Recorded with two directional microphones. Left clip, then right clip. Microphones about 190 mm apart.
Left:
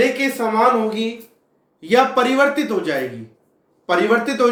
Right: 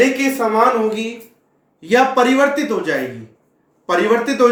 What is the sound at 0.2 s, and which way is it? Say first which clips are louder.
Speech: right 2 dB; 10° right (ahead or behind).